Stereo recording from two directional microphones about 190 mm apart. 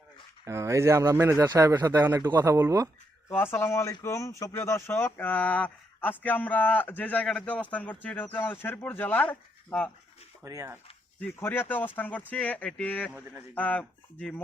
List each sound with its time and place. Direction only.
0.4 s a man's voice: 15° right (ahead or behind)
3.2 s speech: 10° left (ahead or behind)
10.4 s a man's voice: 15° right (ahead or behind)
11.2 s speech: 10° left (ahead or behind)